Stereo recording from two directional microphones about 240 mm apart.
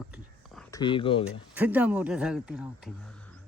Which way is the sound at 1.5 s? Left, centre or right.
Centre.